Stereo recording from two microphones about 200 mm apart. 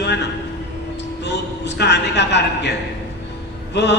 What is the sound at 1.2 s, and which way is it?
A man's voice, 60° left (ahead or behind).